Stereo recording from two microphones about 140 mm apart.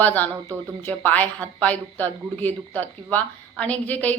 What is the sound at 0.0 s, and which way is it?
A woman's voice, 10° left (ahead or behind).